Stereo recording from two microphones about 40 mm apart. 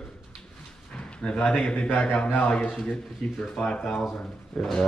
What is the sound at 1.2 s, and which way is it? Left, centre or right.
Speech, centre.